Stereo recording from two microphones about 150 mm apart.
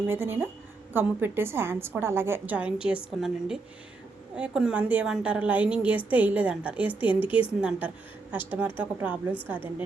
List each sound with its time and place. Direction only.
0.1 s a woman's voice: 15° right (ahead or behind)